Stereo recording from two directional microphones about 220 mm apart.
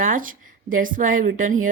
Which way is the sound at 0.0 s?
35° right (ahead or behind).